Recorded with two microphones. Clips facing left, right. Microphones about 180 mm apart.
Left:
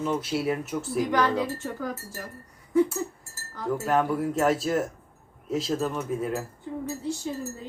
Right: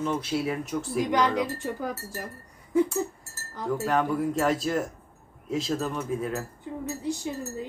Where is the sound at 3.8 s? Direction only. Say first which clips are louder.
Left 1 dB; 5° left (ahead or behind).